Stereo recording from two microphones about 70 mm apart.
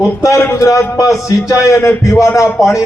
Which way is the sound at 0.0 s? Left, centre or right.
Left.